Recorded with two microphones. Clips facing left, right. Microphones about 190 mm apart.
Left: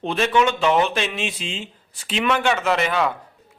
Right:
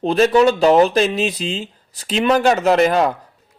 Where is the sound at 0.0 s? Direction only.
35° right (ahead or behind).